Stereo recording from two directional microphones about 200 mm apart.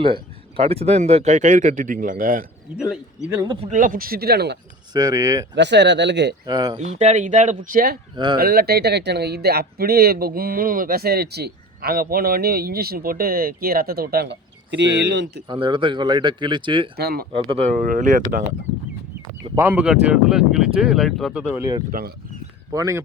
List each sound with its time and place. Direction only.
0.0 s speech: 30° right (ahead or behind); by 2.5 s 45° right (ahead or behind)
3.5 s speech: 35° right (ahead or behind); by 4.5 s 55° right (ahead or behind)
4.9 s speech: 20° right (ahead or behind)
5.5 s speech: 60° right (ahead or behind)
6.4 s speech: 20° right (ahead or behind)
6.7 s speech: 35° right (ahead or behind)
8.1 s speech: 25° right (ahead or behind)
8.4 s speech: 50° right (ahead or behind)
15.4 s speech: 25° right (ahead or behind)
17.0 s speech: 50° right (ahead or behind)
17.5 s speech: 35° right (ahead or behind)
19.5 s speech: 5° right (ahead or behind)
21.6 s speech: 20° right (ahead or behind)